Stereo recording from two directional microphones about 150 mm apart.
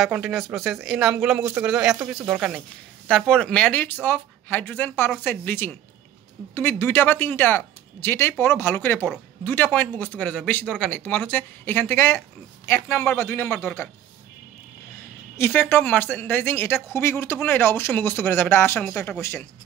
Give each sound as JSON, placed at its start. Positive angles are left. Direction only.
{"t": 0.0, "sound": "speech", "side_deg": 0}
{"t": 15.3, "sound": "speech", "side_deg": 15}